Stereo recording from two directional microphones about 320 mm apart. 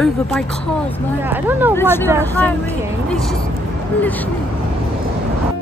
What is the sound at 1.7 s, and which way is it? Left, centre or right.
A woman's voice, centre.